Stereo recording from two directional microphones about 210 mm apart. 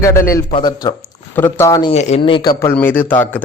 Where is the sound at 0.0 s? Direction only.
15° left (ahead or behind).